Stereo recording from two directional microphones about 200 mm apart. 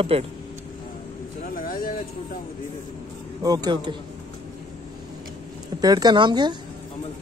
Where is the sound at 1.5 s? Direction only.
45° left (ahead or behind).